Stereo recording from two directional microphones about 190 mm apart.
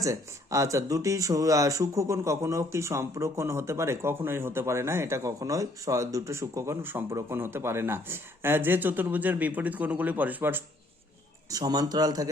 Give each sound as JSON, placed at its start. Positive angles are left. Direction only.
{"t": 0.0, "sound": "speech", "side_deg": -15}